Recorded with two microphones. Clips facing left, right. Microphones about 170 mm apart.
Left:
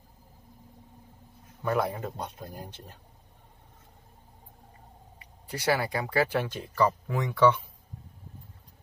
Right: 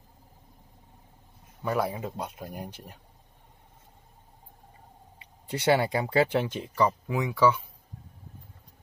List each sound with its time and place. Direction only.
1.6 s speech: 5° right (ahead or behind)
5.2 s speech: 25° right (ahead or behind)
7.1 s speech: 5° right (ahead or behind)